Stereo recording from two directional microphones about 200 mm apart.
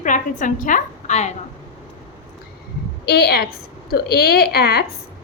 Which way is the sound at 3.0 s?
55° left (ahead or behind).